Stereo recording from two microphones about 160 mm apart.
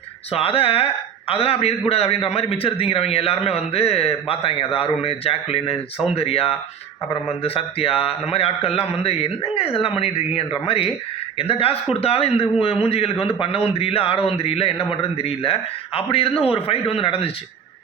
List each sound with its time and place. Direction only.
0.3 s a man's voice: 35° left (ahead or behind)